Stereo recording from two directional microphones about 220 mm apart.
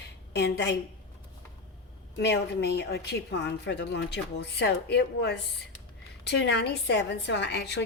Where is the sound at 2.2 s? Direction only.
50° left (ahead or behind).